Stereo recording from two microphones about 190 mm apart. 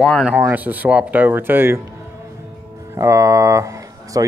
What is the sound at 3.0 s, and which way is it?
Speech, 15° right (ahead or behind).